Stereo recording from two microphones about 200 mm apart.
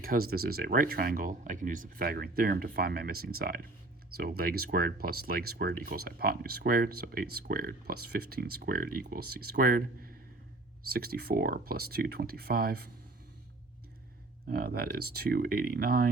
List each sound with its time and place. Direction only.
0.0 s speech: 50° right (ahead or behind)
14.4 s speech: 50° right (ahead or behind)